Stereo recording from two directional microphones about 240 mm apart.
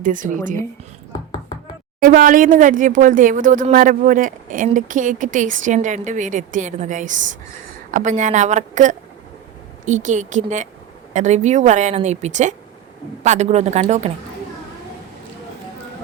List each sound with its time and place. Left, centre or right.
0.0 s speech: right
2.0 s a woman's voice: right